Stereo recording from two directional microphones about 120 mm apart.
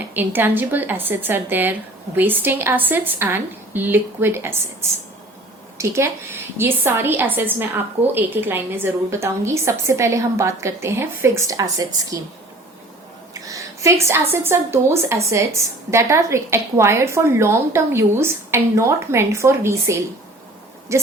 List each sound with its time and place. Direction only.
0.1 s a woman's voice: 15° right (ahead or behind)
5.7 s a woman's voice: 20° right (ahead or behind)
13.5 s a sound: 25° right (ahead or behind)
14.4 s a woman's voice: 20° right (ahead or behind)